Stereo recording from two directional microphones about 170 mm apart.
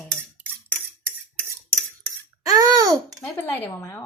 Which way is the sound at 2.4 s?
20° right (ahead or behind).